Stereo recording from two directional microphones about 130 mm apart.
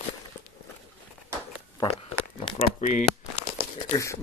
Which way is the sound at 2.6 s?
70° left (ahead or behind).